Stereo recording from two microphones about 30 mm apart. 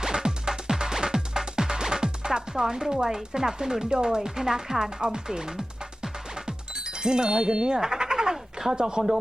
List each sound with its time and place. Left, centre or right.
0.0 s music: centre
3.2 s speech: centre
4.9 s music: right
7.9 s a sound: right
8.7 s speech: right